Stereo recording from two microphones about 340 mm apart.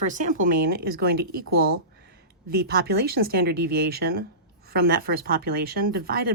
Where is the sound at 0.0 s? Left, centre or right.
Right.